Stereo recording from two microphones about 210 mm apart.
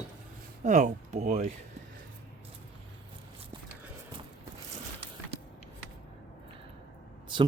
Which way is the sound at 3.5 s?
20° right (ahead or behind).